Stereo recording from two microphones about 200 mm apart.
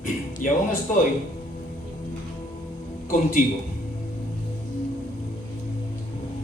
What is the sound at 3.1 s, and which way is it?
Speech, 40° left (ahead or behind).